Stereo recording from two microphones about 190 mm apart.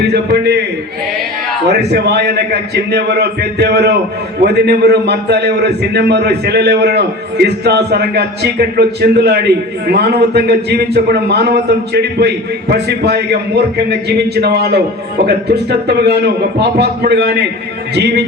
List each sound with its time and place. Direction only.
0.0 s a man's voice: 60° right (ahead or behind)
1.6 s a man's voice: 60° right (ahead or behind)